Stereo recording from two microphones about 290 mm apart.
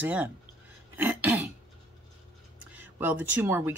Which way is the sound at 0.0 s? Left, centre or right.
Centre.